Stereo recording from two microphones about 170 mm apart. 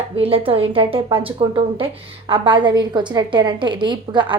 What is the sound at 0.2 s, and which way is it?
A woman's voice, 35° right (ahead or behind).